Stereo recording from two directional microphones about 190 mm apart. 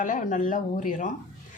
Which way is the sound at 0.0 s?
45° left (ahead or behind).